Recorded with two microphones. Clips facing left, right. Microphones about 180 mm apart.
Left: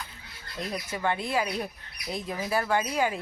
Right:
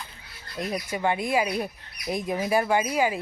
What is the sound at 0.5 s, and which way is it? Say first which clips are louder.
Speech: right 4 dB; 10° right (ahead or behind).